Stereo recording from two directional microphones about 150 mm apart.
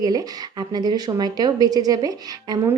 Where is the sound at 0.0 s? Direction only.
25° right (ahead or behind).